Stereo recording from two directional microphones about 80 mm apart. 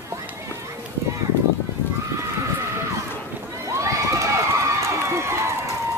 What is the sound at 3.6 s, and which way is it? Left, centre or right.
Run, right.